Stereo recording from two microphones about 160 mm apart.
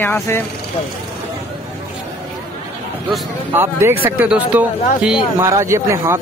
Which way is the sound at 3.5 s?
15° right (ahead or behind).